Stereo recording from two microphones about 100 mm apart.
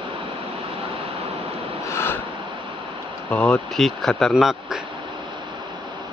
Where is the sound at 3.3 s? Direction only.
15° left (ahead or behind); by 4.7 s 5° right (ahead or behind).